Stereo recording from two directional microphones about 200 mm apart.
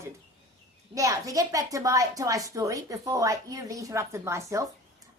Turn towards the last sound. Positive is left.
turn(degrees=-15)  # may be behind; listen again after turning